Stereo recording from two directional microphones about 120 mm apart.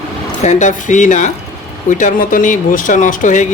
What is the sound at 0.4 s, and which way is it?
A man's voice, 90° left.